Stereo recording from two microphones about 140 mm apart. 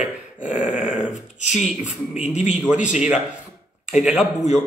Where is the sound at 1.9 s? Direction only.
55° left (ahead or behind).